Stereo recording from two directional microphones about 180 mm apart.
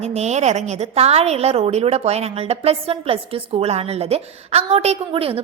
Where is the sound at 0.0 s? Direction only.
35° right (ahead or behind).